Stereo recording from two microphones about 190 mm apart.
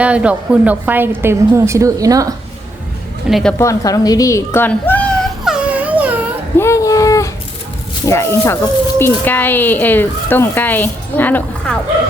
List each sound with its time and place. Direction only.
0.0 s a woman's voice: 5° right (ahead or behind)
3.2 s a woman's voice: centre (ahead or behind)
3.6 s a woman's voice: 15° left (ahead or behind)
5.5 s a sound: 5° right (ahead or behind)
6.6 s a sound: 15° left (ahead or behind)
8.0 s speech: 15° left (ahead or behind)